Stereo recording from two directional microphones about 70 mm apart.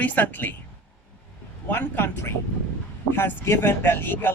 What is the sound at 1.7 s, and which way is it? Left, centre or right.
Speech, left.